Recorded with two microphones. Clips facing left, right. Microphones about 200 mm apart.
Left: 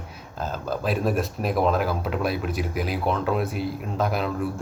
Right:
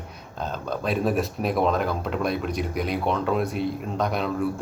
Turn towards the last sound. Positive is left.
turn(degrees=5)  # may be behind; listen again after turning